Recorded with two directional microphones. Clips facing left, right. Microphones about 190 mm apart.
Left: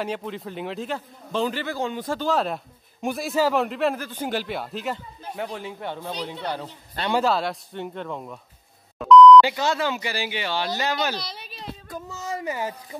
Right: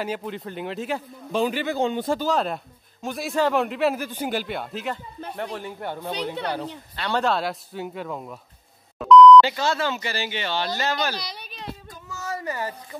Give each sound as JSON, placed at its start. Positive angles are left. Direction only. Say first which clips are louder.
{"t": 0.0, "sound": "speech", "louder": "even", "side_deg": 0}
{"t": 0.9, "sound": "a man's voice", "louder": "right 4 dB", "side_deg": -15}
{"t": 2.1, "sound": "speech", "louder": "even", "side_deg": 0}
{"t": 6.1, "sound": "speech", "louder": "right 3 dB", "side_deg": -65}
{"t": 7.1, "sound": "speech", "louder": "left 1 dB", "side_deg": 5}
{"t": 8.9, "sound": "beep", "louder": "even", "side_deg": 0}
{"t": 9.4, "sound": "speech", "louder": "even", "side_deg": 15}
{"t": 11.1, "sound": "a sound", "louder": "even", "side_deg": 0}
{"t": 12.1, "sound": "a sound", "louder": "even", "side_deg": 15}